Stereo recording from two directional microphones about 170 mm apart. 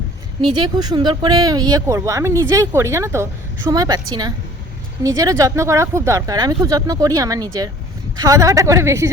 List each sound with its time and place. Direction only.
0.4 s speech: 25° right (ahead or behind)